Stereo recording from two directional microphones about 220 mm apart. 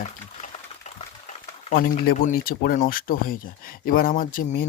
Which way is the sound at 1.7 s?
40° left (ahead or behind).